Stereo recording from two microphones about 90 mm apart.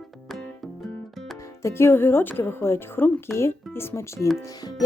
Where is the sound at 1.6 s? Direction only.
25° left (ahead or behind).